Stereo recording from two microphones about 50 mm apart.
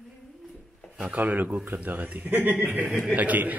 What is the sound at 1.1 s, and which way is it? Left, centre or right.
A man's voice, right.